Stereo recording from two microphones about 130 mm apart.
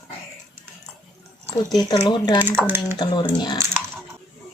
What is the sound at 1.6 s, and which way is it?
Speech, 30° left (ahead or behind).